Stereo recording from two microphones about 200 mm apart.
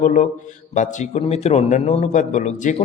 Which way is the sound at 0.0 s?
40° left (ahead or behind).